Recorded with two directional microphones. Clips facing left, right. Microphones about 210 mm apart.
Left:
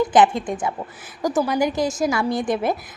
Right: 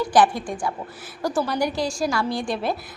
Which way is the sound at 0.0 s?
20° left (ahead or behind).